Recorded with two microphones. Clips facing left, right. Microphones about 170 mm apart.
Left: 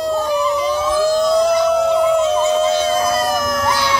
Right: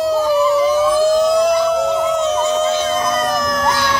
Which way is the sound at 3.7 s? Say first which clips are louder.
Even; 50° right (ahead or behind).